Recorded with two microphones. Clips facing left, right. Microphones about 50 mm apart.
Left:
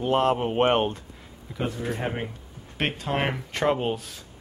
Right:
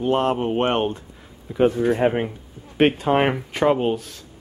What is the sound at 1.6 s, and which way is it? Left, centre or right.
Speech, right.